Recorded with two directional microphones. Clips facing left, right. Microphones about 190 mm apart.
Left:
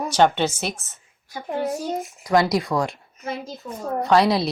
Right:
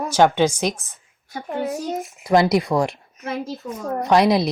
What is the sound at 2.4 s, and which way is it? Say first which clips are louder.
Speech: right 3 dB; 20° right (ahead or behind).